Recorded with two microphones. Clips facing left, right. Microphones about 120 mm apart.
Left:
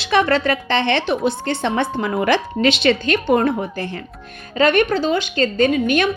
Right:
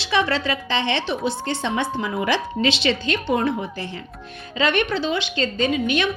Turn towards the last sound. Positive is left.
turn(degrees=50)  # may be behind; listen again after turning